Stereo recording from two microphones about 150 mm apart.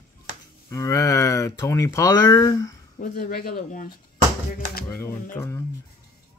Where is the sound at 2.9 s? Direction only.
70° left (ahead or behind).